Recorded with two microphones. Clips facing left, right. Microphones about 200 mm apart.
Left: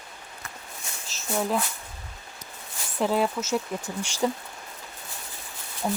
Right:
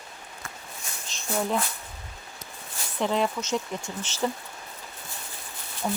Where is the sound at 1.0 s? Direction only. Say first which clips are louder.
Left 1 dB; 5° left (ahead or behind).